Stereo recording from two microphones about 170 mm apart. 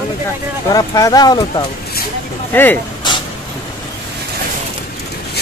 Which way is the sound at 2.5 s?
10° left (ahead or behind).